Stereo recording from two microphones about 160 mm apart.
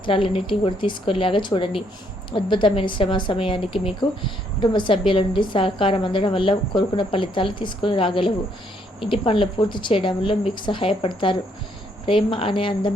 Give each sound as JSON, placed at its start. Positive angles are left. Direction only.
{"t": 0.0, "sound": "a woman's voice", "side_deg": 35}